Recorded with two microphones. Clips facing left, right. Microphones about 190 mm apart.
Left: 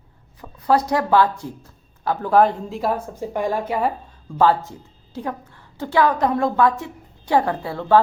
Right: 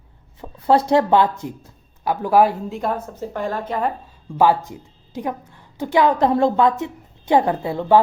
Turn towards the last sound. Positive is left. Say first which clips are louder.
# right 1 dB
turn(degrees=-20)  # may be behind; listen again after turning